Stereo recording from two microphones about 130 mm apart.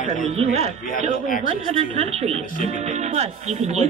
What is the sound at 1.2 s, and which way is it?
Speech, 90° left.